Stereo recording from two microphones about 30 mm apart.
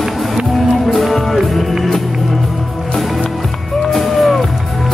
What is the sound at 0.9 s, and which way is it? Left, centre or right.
Music, centre.